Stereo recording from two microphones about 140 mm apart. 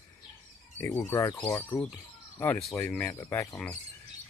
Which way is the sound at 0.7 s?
15° left (ahead or behind).